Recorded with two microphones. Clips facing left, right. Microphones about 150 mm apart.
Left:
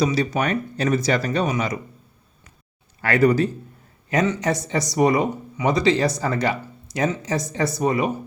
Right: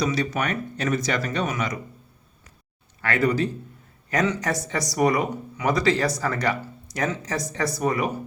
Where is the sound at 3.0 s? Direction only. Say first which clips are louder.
Left 5 dB; 40° left (ahead or behind).